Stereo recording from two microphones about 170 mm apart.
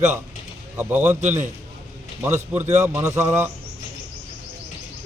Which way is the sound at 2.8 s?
15° right (ahead or behind).